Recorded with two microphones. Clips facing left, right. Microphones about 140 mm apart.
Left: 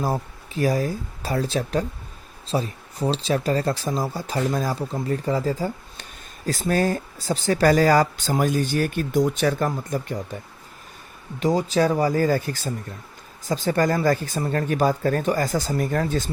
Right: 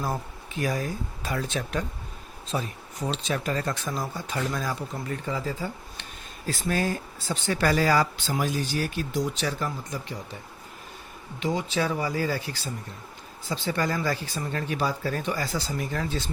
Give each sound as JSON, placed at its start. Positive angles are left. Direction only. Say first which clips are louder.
{"t": 0.0, "sound": "speech", "louder": "left 5 dB", "side_deg": 35}
{"t": 11.3, "sound": "speech", "louder": "left 7 dB", "side_deg": 40}